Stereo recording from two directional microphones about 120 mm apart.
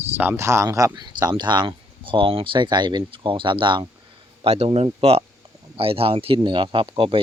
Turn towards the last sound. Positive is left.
turn(degrees=-50)  # may be behind; listen again after turning